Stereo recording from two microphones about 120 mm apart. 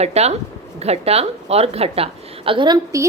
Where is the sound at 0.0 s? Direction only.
65° right (ahead or behind); by 2.7 s 45° right (ahead or behind).